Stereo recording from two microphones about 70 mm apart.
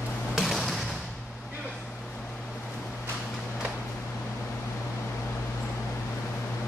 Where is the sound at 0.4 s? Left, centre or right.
Centre.